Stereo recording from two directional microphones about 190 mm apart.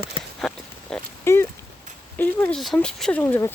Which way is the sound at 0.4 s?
5° left (ahead or behind).